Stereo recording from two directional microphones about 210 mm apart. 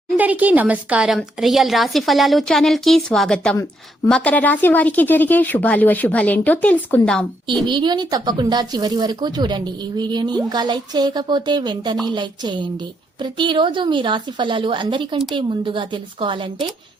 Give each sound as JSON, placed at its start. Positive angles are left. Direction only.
{"t": 0.2, "sound": "a woman's voice", "side_deg": -5}
{"t": 7.7, "sound": "speech", "side_deg": -20}